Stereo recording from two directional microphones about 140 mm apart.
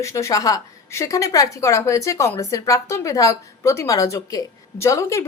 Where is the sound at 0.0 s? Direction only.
20° left (ahead or behind).